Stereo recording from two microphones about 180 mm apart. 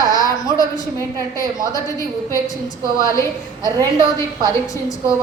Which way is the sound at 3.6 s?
20° right (ahead or behind).